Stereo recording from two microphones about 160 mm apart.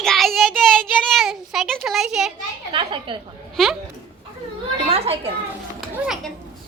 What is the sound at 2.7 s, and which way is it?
Speech, 30° right (ahead or behind).